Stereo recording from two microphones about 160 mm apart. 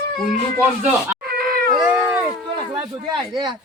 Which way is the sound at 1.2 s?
70° right (ahead or behind).